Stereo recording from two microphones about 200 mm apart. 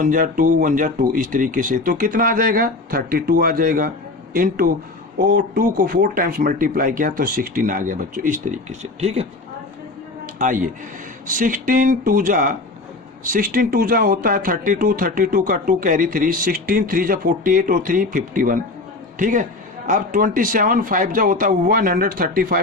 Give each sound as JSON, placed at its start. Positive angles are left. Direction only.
{"t": 0.0, "sound": "speech", "side_deg": -40}
{"t": 10.3, "sound": "a man's voice", "side_deg": -40}